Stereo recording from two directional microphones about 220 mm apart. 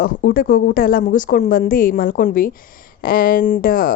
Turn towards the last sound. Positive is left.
turn(degrees=40)  # may be behind; listen again after turning